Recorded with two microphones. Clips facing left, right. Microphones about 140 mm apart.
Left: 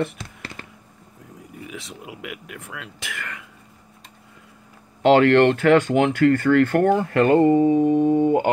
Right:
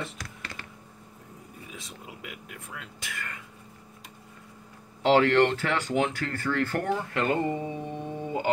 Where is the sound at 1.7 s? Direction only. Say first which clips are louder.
Left 7 dB; 90° left.